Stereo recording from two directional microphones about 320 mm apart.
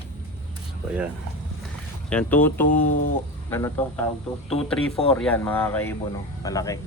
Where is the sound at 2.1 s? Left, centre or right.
Centre.